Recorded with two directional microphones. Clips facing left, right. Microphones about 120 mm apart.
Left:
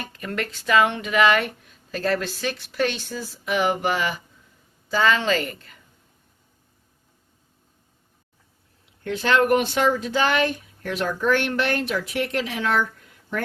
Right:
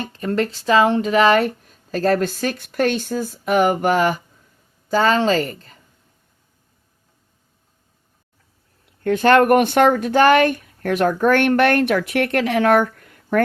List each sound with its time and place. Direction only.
0.0 s speech: 30° right (ahead or behind)
9.0 s speech: 55° right (ahead or behind)